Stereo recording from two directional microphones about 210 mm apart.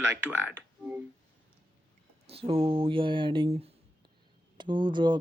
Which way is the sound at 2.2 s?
25° right (ahead or behind).